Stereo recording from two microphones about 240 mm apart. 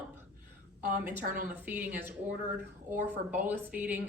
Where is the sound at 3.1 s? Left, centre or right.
Centre.